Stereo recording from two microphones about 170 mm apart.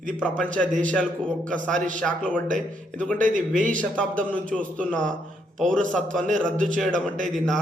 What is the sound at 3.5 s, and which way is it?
Speech, 50° right (ahead or behind).